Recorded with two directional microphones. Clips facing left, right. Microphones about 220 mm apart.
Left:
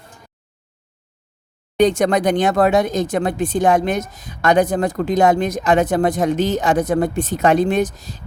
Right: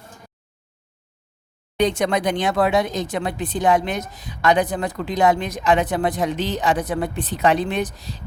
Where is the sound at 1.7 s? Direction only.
45° left (ahead or behind).